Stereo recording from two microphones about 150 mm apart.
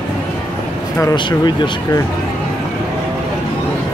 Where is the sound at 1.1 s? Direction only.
30° left (ahead or behind).